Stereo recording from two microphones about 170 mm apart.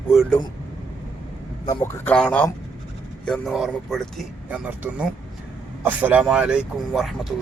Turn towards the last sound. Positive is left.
turn(degrees=0)  # may be behind; listen again after turning